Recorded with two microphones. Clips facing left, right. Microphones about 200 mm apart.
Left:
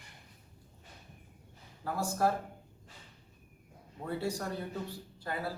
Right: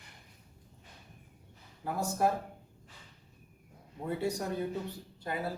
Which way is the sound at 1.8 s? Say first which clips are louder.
Right 1 dB; 20° right (ahead or behind).